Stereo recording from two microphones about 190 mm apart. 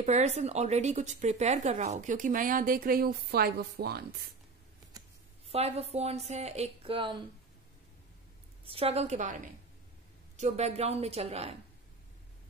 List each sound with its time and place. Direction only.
0.0 s speech: 35° right (ahead or behind); by 4.0 s 55° right (ahead or behind)
5.5 s speech: 30° right (ahead or behind)
8.6 s speech: 30° right (ahead or behind)